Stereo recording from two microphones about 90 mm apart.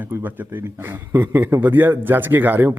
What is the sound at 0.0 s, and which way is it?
Speech, 20° right (ahead or behind).